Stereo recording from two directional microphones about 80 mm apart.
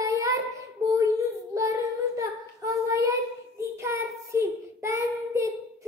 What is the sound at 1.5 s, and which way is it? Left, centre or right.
Child singing, right.